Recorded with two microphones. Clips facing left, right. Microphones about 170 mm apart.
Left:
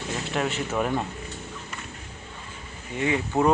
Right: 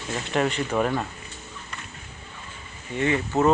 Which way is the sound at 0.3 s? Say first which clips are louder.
Right 4 dB; centre (ahead or behind).